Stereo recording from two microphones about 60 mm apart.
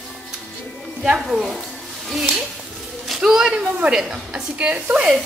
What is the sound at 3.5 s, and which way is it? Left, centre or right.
A woman's voice, centre.